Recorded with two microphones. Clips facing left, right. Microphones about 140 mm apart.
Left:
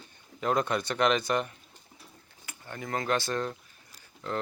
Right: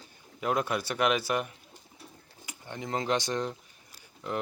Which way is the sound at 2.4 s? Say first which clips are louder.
Right 1 dB; 20° right (ahead or behind).